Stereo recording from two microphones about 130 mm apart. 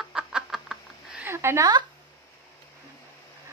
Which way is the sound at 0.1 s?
5° right (ahead or behind).